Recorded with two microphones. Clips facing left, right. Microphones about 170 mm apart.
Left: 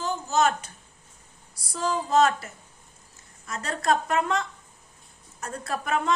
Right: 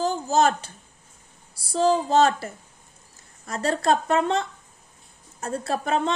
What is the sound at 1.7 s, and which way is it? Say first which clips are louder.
A woman's voice: right 4 dB; 30° right (ahead or behind).